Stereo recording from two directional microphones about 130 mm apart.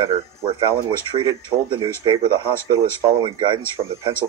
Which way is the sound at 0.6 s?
40° right (ahead or behind).